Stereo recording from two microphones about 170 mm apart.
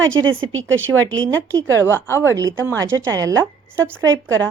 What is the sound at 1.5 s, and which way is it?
Speech, 20° right (ahead or behind).